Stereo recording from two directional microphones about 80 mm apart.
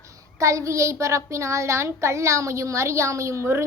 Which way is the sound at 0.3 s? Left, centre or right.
Right.